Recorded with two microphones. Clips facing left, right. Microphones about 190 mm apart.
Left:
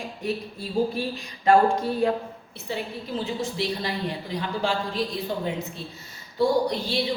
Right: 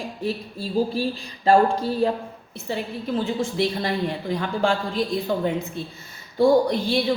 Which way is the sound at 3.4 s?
50° right (ahead or behind).